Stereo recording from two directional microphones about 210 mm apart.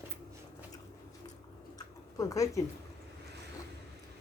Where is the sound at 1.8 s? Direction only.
15° left (ahead or behind).